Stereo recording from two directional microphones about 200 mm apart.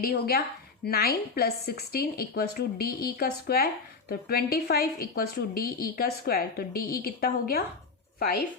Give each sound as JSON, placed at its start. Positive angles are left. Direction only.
{"t": 0.0, "sound": "a woman's voice", "side_deg": 50}